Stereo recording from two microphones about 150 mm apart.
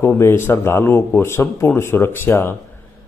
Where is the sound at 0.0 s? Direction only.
15° left (ahead or behind).